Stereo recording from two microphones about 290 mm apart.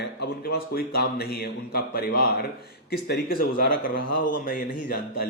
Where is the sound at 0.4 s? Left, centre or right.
Left.